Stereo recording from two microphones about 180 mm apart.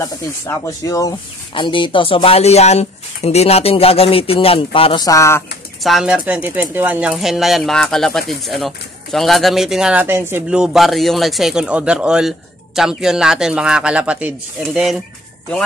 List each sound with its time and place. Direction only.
0.7 s speech: 20° left (ahead or behind)
5.0 s speech: 15° left (ahead or behind)
5.9 s speech: centre (ahead or behind)